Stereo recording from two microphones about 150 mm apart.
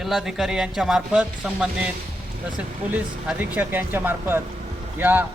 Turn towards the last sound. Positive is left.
turn(degrees=-15)  # may be behind; listen again after turning